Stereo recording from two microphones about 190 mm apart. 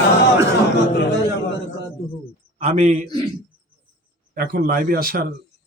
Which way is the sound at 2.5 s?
35° right (ahead or behind).